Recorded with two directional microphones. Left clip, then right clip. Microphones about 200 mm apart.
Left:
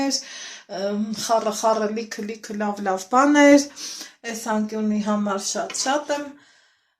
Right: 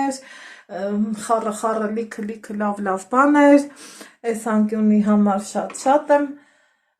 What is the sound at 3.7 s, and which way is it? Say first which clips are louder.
Speech: left 5 dB; 20° right (ahead or behind).